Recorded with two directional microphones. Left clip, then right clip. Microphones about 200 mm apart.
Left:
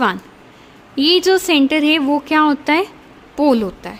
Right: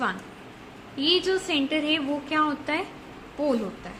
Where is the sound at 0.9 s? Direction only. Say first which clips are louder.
Left 10 dB; 55° left (ahead or behind).